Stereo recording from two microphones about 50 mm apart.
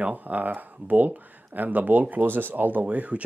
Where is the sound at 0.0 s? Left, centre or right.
Right.